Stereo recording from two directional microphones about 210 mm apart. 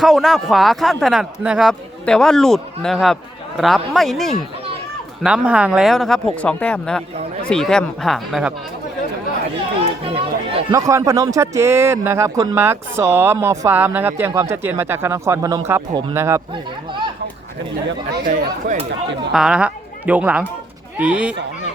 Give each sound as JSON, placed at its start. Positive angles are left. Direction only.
{"t": 0.0, "sound": "speech", "side_deg": 0}
{"t": 10.0, "sound": "speech", "side_deg": -25}
{"t": 10.7, "sound": "speech", "side_deg": -15}
{"t": 15.9, "sound": "speech", "side_deg": -25}
{"t": 16.1, "sound": "speech", "side_deg": -15}
{"t": 16.5, "sound": "speech", "side_deg": -25}
{"t": 18.1, "sound": "speech", "side_deg": -45}
{"t": 19.3, "sound": "speech", "side_deg": -5}